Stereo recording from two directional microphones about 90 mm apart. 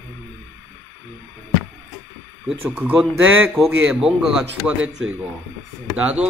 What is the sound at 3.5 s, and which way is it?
A man's voice, 5° right (ahead or behind).